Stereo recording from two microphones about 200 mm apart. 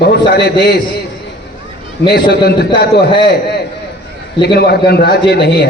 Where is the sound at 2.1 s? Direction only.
55° left (ahead or behind).